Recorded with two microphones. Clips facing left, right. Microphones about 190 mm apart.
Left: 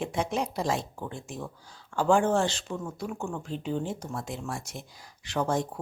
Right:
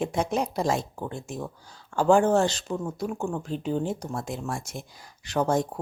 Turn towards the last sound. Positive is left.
turn(degrees=-45)  # may be behind; listen again after turning